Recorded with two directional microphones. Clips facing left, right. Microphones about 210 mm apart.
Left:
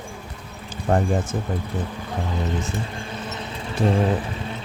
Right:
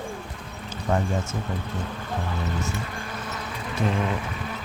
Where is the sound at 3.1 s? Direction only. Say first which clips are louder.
Left 2 dB; 25° left (ahead or behind).